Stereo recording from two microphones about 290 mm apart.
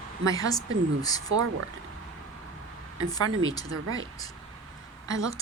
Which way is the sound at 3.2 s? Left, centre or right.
Right.